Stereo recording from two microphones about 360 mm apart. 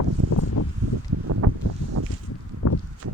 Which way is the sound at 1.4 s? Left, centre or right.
Right.